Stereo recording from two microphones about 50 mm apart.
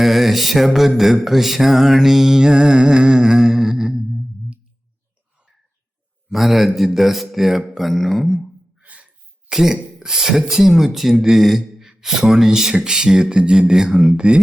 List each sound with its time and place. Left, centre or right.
0.0 s mantra: centre
6.3 s a man's voice: centre
8.8 s a sound: right
9.5 s speech: centre
10.0 s mantra: centre